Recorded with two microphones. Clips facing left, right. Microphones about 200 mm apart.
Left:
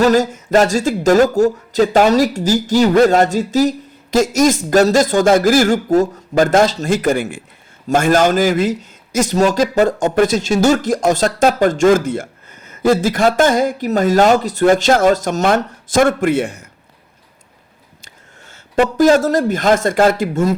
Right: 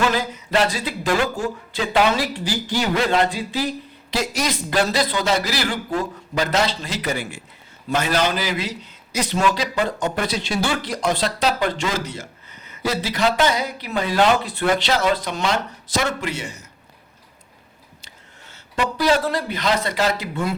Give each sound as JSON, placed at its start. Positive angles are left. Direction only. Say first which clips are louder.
{"t": 0.0, "sound": "a man's voice", "louder": "left 9 dB", "side_deg": 45}
{"t": 18.0, "sound": "speech", "louder": "left 6 dB", "side_deg": 50}